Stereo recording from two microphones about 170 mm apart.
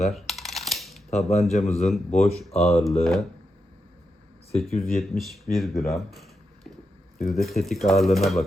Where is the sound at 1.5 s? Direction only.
40° left (ahead or behind).